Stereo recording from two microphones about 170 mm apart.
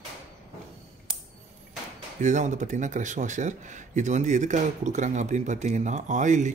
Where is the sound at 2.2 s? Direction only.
45° right (ahead or behind).